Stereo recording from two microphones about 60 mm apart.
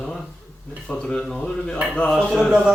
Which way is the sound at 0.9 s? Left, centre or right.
Centre.